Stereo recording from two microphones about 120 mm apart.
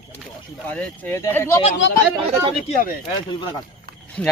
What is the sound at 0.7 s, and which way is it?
Speech, 15° left (ahead or behind).